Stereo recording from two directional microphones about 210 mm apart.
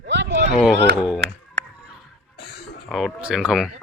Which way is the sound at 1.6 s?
55° right (ahead or behind).